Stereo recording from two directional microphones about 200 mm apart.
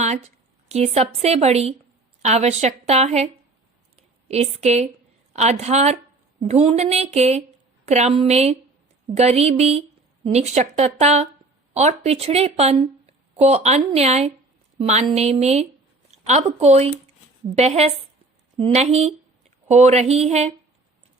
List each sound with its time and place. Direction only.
0.7 s speech: 30° right (ahead or behind)
4.3 s speech: 35° right (ahead or behind)